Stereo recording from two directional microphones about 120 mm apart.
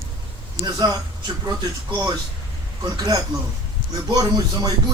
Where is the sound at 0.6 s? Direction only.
30° right (ahead or behind).